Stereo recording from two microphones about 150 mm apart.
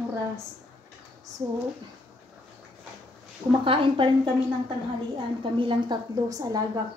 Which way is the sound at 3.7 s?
35° right (ahead or behind).